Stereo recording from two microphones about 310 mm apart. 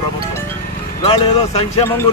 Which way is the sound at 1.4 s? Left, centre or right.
Centre.